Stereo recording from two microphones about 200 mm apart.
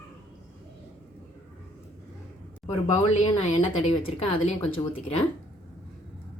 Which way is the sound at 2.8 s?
35° left (ahead or behind).